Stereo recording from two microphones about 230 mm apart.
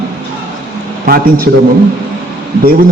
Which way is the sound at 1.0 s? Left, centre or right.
Right.